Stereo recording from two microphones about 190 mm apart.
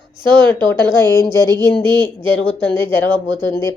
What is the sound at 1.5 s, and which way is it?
Speech, 10° left (ahead or behind).